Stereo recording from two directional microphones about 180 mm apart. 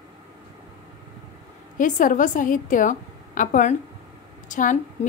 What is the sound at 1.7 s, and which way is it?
A woman's voice, 45° left (ahead or behind).